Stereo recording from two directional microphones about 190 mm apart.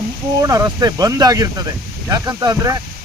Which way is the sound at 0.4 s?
20° right (ahead or behind).